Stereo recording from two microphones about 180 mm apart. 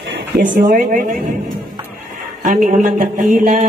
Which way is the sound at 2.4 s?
45° right (ahead or behind).